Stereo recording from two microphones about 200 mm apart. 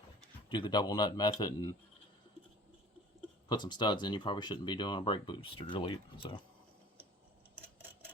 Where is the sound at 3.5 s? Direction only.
20° left (ahead or behind).